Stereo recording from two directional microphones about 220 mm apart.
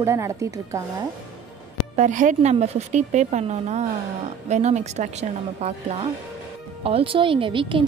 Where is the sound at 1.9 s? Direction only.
35° right (ahead or behind).